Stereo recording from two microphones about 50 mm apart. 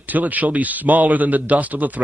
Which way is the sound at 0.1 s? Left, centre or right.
Right.